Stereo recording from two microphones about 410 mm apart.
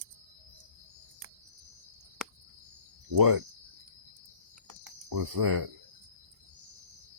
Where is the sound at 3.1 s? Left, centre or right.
Right.